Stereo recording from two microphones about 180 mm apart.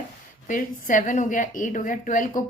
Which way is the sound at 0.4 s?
45° left (ahead or behind).